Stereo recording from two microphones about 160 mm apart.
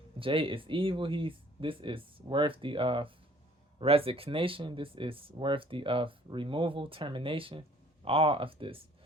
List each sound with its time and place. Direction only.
0.2 s speech: 35° right (ahead or behind)